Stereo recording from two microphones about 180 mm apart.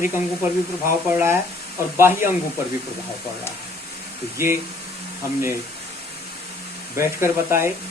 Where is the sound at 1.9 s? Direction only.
10° right (ahead or behind).